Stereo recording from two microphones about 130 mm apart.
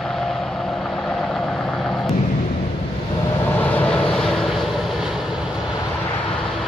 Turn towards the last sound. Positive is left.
turn(degrees=0)  # may be behind; listen again after turning